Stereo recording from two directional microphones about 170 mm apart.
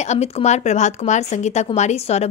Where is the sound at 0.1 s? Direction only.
40° left (ahead or behind).